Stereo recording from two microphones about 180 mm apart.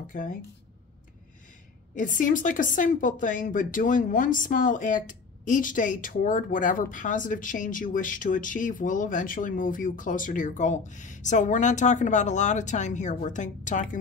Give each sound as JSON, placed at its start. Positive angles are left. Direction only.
{"t": 0.0, "sound": "speech", "side_deg": 50}
{"t": 2.0, "sound": "speech", "side_deg": 45}